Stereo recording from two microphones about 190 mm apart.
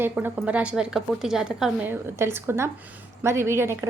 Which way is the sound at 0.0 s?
10° right (ahead or behind).